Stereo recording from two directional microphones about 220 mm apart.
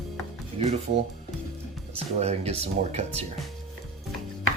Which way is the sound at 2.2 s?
30° right (ahead or behind).